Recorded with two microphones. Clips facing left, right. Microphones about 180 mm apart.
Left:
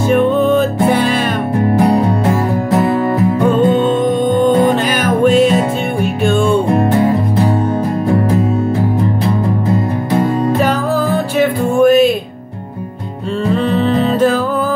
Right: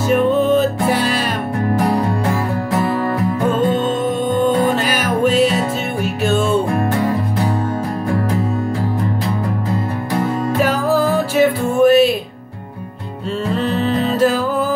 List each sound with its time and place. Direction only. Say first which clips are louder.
0.1 s music: left 2 dB; 5° right (ahead or behind)
1.7 s music: left 4 dB; 20° left (ahead or behind)
6.7 s music: left 5 dB; 20° left (ahead or behind)
11.3 s music: left 2 dB; centre (ahead or behind)